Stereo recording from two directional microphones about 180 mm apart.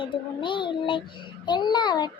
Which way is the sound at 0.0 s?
25° left (ahead or behind).